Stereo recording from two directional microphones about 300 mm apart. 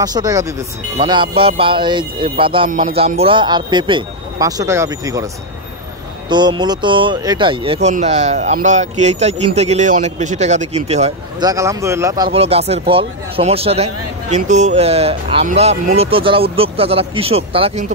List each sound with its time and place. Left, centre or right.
0.0 s speech: centre
6.2 s speech: centre